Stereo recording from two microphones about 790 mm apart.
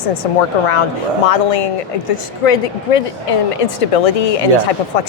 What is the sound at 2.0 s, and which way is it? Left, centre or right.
Speech, left.